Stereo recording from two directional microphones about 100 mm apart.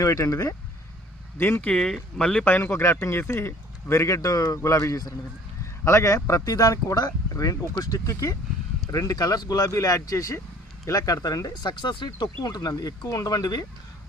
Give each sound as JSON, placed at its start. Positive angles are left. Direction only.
{"t": 0.0, "sound": "speech", "side_deg": 30}
{"t": 1.4, "sound": "a man's voice", "side_deg": 20}
{"t": 1.6, "sound": "speech", "side_deg": 5}
{"t": 2.4, "sound": "a man's voice", "side_deg": 20}
{"t": 11.7, "sound": "speech", "side_deg": 50}